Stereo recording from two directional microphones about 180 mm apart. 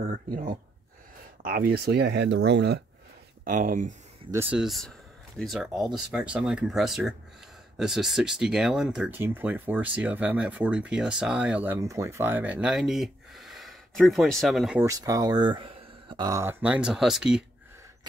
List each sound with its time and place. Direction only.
0.0 s speech: 45° right (ahead or behind); by 2.8 s 70° right (ahead or behind)
3.4 s speech: 50° right (ahead or behind)
4.3 s speech: 10° right (ahead or behind)
14.8 s speech: 20° right (ahead or behind)